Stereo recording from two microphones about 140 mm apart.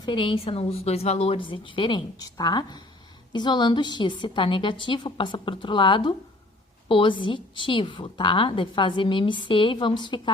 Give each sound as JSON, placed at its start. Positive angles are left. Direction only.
{"t": 0.0, "sound": "a woman's voice", "side_deg": 35}